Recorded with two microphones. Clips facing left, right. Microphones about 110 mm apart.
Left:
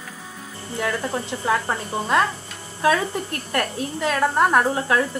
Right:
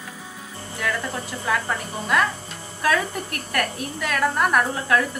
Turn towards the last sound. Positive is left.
turn(degrees=25)  # may be behind; listen again after turning